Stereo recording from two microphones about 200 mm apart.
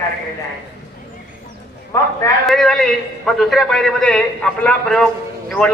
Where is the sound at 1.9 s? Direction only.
15° left (ahead or behind).